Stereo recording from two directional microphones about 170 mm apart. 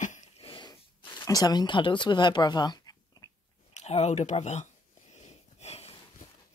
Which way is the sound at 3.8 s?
40° left (ahead or behind).